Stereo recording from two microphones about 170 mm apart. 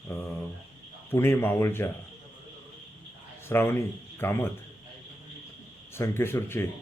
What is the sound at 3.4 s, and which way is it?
A man's voice, 15° left (ahead or behind).